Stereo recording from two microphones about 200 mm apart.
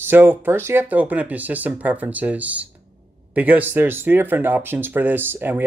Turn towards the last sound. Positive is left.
turn(degrees=-10)  # may be behind; listen again after turning